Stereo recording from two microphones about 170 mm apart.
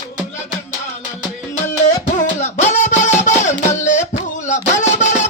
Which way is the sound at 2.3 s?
45° left (ahead or behind).